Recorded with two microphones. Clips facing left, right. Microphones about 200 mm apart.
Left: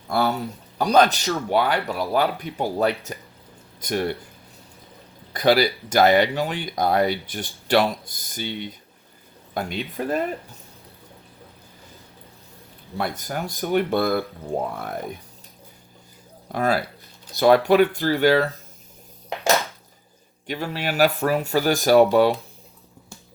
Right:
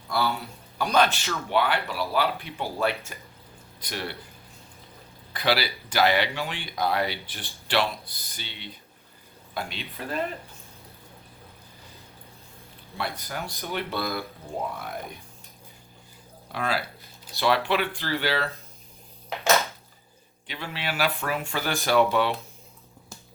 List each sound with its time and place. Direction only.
0.1 s speech: 50° left (ahead or behind)
0.8 s speech: 35° left (ahead or behind)
5.3 s speech: 45° left (ahead or behind)
13.0 s speech: 45° left (ahead or behind)
16.5 s speech: 45° left (ahead or behind)
20.5 s speech: 45° left (ahead or behind)